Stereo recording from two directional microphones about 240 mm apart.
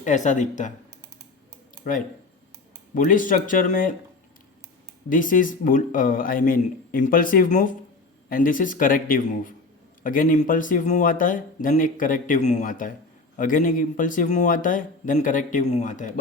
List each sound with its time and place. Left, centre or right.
0.0 s speech: left
1.8 s speech: left
5.0 s speech: left